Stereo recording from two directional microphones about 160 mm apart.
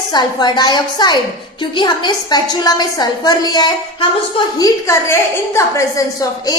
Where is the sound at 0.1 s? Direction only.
25° left (ahead or behind).